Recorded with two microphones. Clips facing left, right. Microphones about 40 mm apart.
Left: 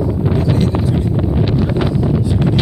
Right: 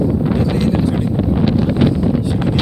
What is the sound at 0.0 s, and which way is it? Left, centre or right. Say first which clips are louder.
Wind noise: right 1 dB; centre.